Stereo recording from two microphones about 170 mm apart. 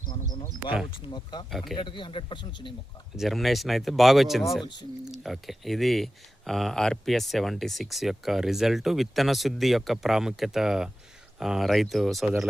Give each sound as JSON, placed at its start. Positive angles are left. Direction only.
{"t": 0.1, "sound": "speech", "side_deg": 25}
{"t": 1.5, "sound": "speech", "side_deg": 0}
{"t": 1.7, "sound": "speech", "side_deg": 30}
{"t": 3.2, "sound": "speech", "side_deg": 0}